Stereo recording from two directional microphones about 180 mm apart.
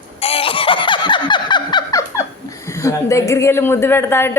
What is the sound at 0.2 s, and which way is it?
Laughter, 30° left (ahead or behind).